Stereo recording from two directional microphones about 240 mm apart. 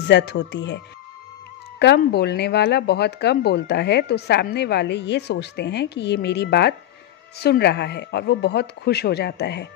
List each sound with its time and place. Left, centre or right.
0.1 s speech: left
1.8 s speech: left